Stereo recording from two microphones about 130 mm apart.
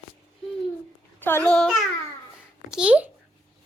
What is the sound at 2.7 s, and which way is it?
Speech, 5° right (ahead or behind).